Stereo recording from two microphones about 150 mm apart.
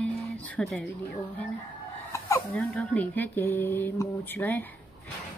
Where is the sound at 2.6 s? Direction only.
10° left (ahead or behind).